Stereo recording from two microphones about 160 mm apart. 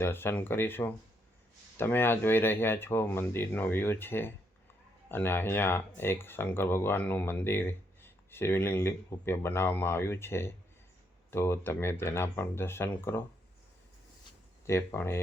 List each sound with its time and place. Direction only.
0.0 s speech: 15° left (ahead or behind)
14.7 s speech: 15° left (ahead or behind)